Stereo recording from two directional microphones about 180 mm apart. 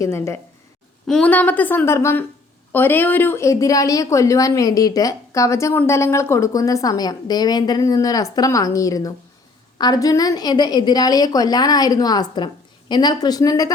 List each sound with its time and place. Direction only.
0.0 s a woman's voice: 15° left (ahead or behind)